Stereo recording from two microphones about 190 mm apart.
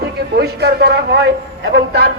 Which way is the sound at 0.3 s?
60° right (ahead or behind).